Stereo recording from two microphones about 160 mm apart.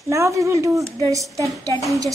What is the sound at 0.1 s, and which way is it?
A woman's voice, 20° right (ahead or behind).